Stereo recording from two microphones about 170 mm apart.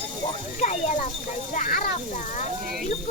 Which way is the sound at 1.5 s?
50° left (ahead or behind).